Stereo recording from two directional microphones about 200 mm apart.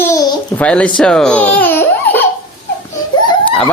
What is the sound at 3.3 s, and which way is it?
Snicker, 25° left (ahead or behind).